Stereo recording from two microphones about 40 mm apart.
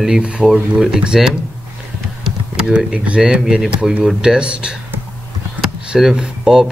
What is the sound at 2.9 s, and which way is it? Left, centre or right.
Speech, right.